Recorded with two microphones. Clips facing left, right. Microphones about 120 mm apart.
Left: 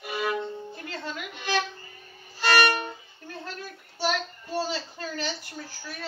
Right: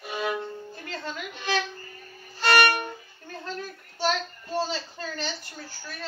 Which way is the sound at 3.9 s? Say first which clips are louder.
Right 1 dB; 5° left (ahead or behind).